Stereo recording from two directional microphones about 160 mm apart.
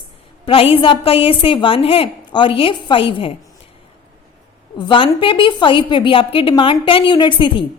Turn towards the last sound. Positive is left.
turn(degrees=30)  # may be behind; listen again after turning